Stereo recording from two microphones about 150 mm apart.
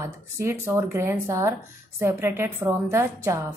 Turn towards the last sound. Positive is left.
turn(degrees=-20)  # may be behind; listen again after turning